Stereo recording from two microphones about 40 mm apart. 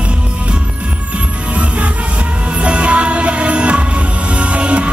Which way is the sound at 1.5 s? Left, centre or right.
Right.